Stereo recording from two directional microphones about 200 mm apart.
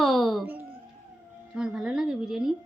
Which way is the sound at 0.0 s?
Centre (ahead or behind).